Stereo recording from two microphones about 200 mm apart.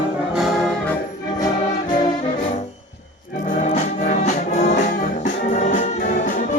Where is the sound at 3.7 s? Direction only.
35° left (ahead or behind).